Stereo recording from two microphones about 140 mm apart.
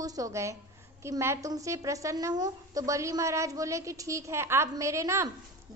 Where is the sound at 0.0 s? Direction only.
25° right (ahead or behind).